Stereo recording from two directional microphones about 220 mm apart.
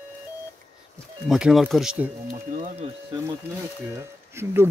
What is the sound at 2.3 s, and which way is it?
Speech, 35° right (ahead or behind).